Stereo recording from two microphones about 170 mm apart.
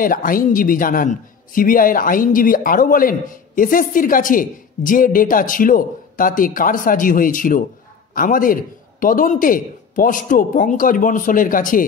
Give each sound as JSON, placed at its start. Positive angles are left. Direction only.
{"t": 0.0, "sound": "a man's voice", "side_deg": 55}